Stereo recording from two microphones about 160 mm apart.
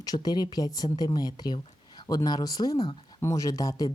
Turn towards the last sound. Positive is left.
turn(degrees=20)  # may be behind; listen again after turning